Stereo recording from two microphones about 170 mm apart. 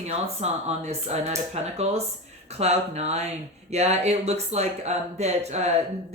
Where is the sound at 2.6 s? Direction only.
40° right (ahead or behind).